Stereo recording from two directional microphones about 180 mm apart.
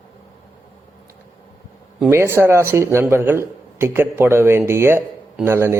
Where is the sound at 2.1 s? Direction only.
15° right (ahead or behind).